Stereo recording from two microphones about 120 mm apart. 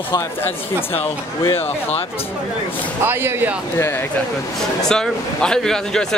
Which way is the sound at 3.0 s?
20° right (ahead or behind).